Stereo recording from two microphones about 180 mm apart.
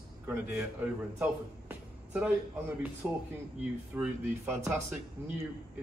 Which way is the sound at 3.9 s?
5° right (ahead or behind).